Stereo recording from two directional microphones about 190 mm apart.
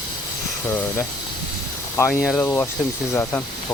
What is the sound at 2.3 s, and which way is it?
Speech, 10° left (ahead or behind).